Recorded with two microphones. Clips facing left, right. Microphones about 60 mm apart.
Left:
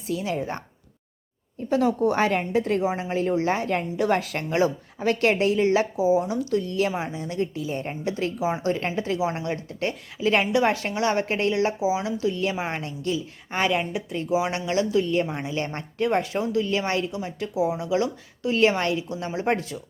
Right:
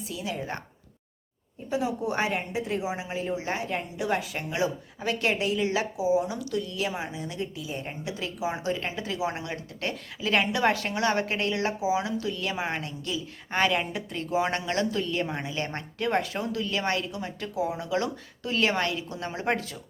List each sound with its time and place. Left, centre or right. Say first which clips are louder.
0.1 s a woman's voice: left 7 dB; left
1.7 s a woman's voice: left 7 dB; left
2.8 s a woman's voice: left 6 dB; left
3.1 s a woman's voice: left 7 dB; left
4.2 s a woman's voice: left 4 dB; left
4.4 s a woman's voice: left 6 dB; left; by 12.1 s centre
12.2 s a woman's voice: left 5 dB; left
13.0 s a woman's voice: left 6 dB; left
13.5 s speech: left 1 dB; centre
14.7 s speech: left 5 dB; centre